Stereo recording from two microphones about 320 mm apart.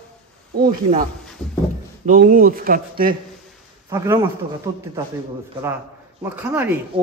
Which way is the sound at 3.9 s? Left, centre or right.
Centre.